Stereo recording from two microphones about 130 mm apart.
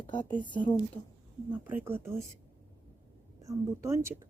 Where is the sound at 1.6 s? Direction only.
15° right (ahead or behind).